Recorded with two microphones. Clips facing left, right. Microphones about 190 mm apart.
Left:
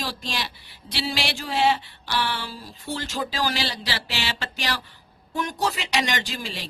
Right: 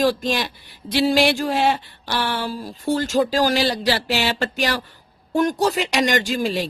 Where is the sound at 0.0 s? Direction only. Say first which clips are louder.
Right 11 dB; 50° right (ahead or behind).